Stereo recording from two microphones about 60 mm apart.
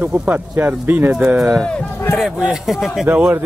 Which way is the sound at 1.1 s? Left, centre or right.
Right.